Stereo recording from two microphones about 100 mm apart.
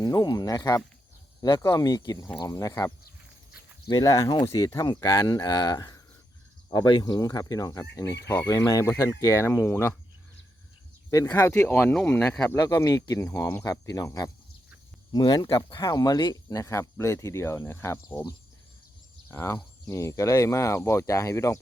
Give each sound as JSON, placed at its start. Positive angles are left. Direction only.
{"t": 0.0, "sound": "speech", "side_deg": 40}
{"t": 11.3, "sound": "speech", "side_deg": 25}
{"t": 12.2, "sound": "speech", "side_deg": 5}
{"t": 12.5, "sound": "speech", "side_deg": 40}
{"t": 19.3, "sound": "speech", "side_deg": 25}